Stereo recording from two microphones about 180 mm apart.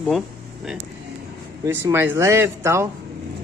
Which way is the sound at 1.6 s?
15° right (ahead or behind).